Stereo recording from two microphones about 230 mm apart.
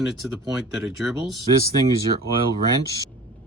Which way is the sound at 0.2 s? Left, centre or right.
Centre.